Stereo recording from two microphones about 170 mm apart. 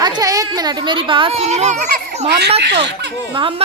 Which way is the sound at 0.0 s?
25° right (ahead or behind).